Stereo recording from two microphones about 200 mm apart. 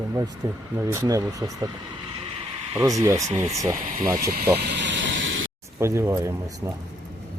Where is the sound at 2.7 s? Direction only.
15° right (ahead or behind).